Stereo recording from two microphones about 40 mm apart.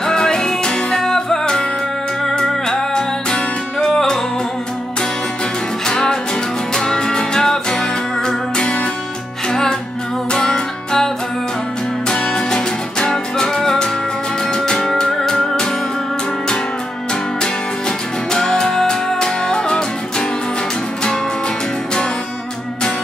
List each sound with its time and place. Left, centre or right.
0.0 s music: centre
5.9 s music: centre
12.1 s music: centre
17.1 s music: centre